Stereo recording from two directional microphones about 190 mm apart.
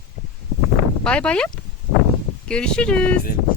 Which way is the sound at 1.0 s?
5° left (ahead or behind).